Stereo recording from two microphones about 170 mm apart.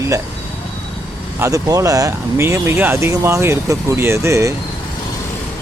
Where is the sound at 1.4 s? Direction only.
20° right (ahead or behind).